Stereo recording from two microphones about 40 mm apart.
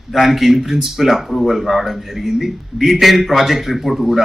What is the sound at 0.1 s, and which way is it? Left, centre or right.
Speech, centre.